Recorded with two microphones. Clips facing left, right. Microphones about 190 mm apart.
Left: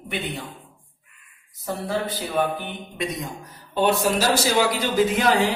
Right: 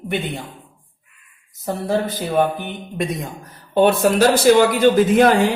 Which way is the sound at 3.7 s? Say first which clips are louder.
Right 6 dB; 55° right (ahead or behind).